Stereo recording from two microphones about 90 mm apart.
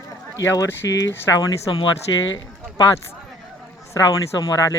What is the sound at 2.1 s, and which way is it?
Speech, 55° left (ahead or behind).